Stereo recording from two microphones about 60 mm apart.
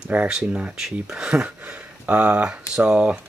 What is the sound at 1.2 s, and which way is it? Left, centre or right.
Speech, centre.